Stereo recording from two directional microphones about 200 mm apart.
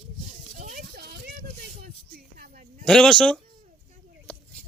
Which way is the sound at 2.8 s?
5° left (ahead or behind).